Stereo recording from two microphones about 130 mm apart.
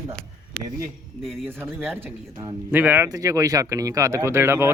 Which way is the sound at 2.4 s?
15° right (ahead or behind).